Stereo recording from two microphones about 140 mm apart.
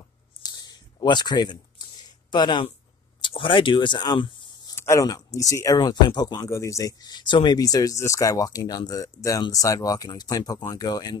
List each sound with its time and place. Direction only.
0.4 s a sound: 30° left (ahead or behind)
3.2 s speech: 40° left (ahead or behind)
4.7 s speech: 20° left (ahead or behind)